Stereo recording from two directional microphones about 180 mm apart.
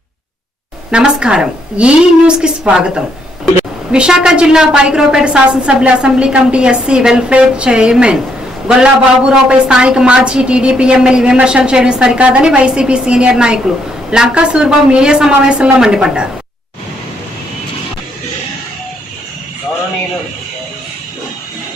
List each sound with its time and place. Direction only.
0.9 s a woman's voice: 5° right (ahead or behind)